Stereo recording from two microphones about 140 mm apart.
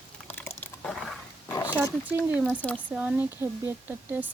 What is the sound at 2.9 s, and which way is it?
Speech, 10° right (ahead or behind).